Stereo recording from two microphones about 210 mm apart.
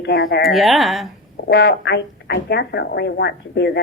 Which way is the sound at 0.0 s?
50° left (ahead or behind).